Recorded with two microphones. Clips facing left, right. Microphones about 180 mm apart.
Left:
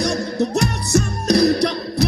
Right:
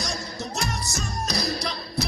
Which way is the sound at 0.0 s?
60° left (ahead or behind).